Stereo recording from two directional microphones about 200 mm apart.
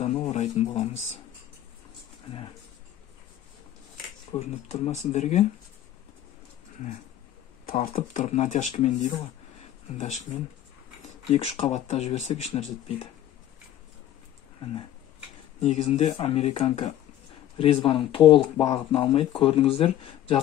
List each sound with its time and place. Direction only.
0.0 s speech: 30° left (ahead or behind)
4.4 s speech: 35° left (ahead or behind)
7.6 s speech: 45° left (ahead or behind)
11.2 s speech: 30° left (ahead or behind)
15.6 s speech: 35° left (ahead or behind)